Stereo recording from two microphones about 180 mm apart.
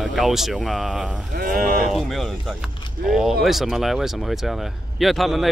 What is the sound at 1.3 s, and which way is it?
Speech, 45° right (ahead or behind).